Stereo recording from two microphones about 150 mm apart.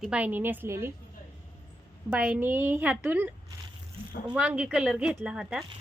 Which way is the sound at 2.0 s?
5° right (ahead or behind).